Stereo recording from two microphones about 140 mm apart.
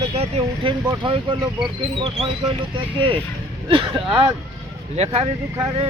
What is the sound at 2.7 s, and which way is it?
Speech, 40° right (ahead or behind).